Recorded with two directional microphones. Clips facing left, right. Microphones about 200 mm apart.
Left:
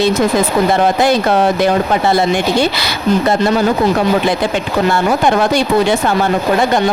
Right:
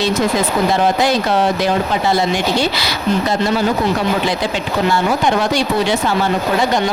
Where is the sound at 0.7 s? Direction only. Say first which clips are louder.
Left 2 dB; 55° left (ahead or behind).